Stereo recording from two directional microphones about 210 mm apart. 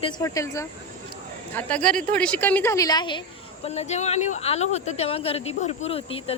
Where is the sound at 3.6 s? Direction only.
30° left (ahead or behind).